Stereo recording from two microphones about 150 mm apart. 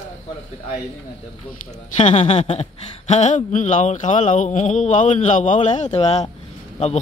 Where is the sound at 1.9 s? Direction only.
50° left (ahead or behind).